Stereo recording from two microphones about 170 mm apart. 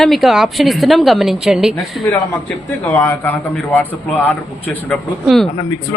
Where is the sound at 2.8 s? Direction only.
10° left (ahead or behind).